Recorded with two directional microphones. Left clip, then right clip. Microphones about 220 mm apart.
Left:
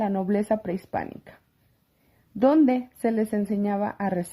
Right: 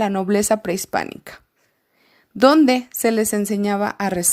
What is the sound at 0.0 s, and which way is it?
A woman's voice, 30° right (ahead or behind).